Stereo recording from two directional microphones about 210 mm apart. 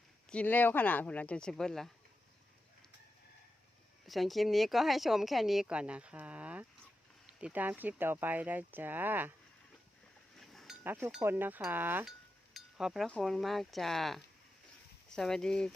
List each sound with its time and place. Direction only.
0.3 s speech: 5° left (ahead or behind)
4.0 s speech: centre (ahead or behind)
10.3 s chink: centre (ahead or behind)
10.8 s speech: 10° right (ahead or behind)